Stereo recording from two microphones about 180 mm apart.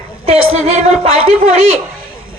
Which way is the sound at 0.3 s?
35° right (ahead or behind).